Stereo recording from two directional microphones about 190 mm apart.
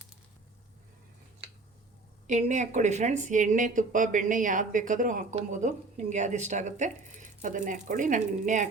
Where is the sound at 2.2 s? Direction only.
40° right (ahead or behind).